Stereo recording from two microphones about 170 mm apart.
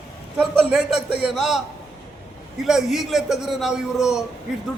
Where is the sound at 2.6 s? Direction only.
Centre (ahead or behind).